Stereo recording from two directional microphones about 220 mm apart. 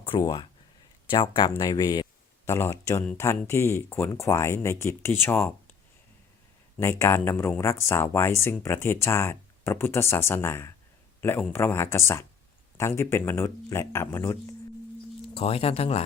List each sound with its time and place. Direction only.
0.1 s speech: 15° left (ahead or behind)
6.7 s speech: 10° left (ahead or behind)
15.4 s speech: 25° left (ahead or behind)